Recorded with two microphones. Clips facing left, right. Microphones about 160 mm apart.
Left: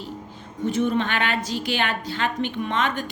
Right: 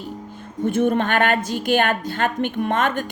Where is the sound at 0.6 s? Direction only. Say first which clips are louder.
Right 3 dB; 55° right (ahead or behind).